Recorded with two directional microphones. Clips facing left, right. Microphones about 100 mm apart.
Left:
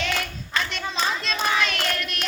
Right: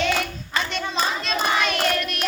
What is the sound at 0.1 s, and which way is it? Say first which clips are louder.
Hands: right 3 dB; 5° right (ahead or behind).